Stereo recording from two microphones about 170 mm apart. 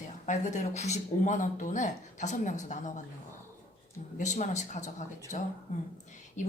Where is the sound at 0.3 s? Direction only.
45° left (ahead or behind).